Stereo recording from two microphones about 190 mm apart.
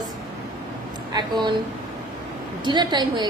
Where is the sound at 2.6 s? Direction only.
25° right (ahead or behind).